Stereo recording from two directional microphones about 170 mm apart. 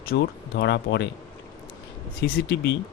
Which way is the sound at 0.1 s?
70° left (ahead or behind).